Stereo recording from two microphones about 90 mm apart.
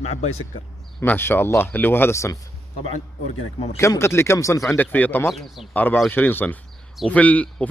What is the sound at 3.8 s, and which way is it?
Speech, 30° left (ahead or behind).